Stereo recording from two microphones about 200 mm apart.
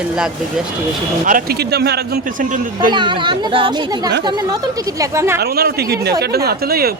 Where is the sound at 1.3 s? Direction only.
45° right (ahead or behind).